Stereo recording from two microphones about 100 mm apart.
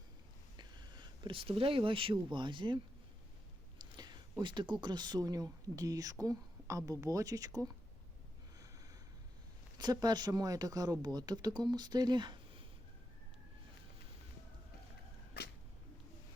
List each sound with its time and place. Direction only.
0.5 s a woman's voice: 45° right (ahead or behind)
9.7 s speech: 40° right (ahead or behind)